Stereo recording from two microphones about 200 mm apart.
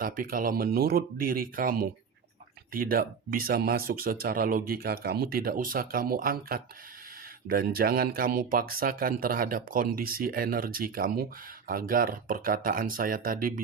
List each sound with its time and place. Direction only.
0.0 s speech: 45° right (ahead or behind)